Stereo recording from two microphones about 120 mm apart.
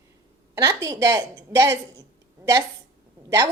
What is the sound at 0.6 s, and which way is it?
A woman's voice, 30° right (ahead or behind).